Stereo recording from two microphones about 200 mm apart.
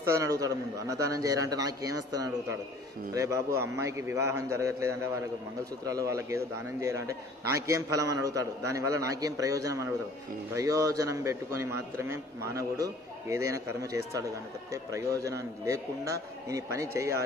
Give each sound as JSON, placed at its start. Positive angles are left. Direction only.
{"t": 0.1, "sound": "a man's voice", "side_deg": -15}